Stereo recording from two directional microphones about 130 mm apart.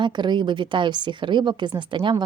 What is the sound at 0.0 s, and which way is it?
A woman's voice, 35° right (ahead or behind).